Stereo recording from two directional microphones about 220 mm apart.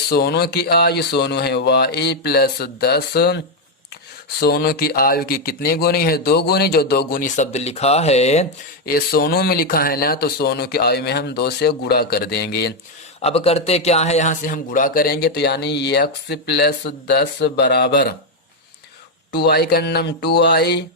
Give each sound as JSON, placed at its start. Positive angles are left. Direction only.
{"t": 0.1, "sound": "speech", "side_deg": 45}
{"t": 8.9, "sound": "speech", "side_deg": 45}
{"t": 13.2, "sound": "speech", "side_deg": 25}
{"t": 19.3, "sound": "speech", "side_deg": 45}